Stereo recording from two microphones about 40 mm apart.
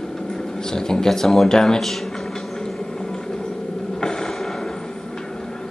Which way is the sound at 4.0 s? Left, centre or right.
Centre.